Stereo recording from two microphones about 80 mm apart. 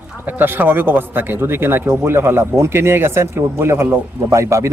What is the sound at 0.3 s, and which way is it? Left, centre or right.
A man's voice, right.